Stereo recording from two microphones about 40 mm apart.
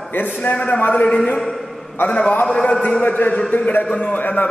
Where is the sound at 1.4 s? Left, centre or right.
Centre.